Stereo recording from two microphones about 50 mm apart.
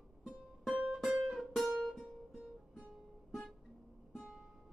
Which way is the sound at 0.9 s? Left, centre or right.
Centre.